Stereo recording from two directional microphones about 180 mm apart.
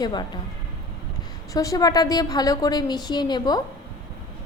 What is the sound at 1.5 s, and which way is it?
A woman's voice, 20° left (ahead or behind).